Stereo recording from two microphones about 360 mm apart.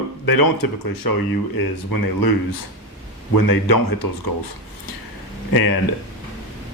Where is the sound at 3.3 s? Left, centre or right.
Left.